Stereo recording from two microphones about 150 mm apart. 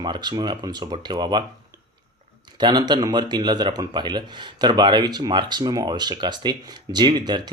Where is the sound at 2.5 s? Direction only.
30° right (ahead or behind).